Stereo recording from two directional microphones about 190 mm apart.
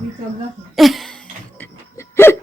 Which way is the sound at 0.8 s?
Centre (ahead or behind).